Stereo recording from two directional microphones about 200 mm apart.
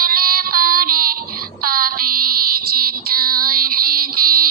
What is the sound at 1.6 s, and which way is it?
Child singing, 45° right (ahead or behind).